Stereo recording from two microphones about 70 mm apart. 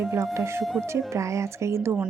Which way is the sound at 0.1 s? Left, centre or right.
Right.